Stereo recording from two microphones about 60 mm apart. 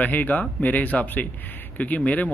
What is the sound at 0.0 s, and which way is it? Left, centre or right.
A man's voice, left.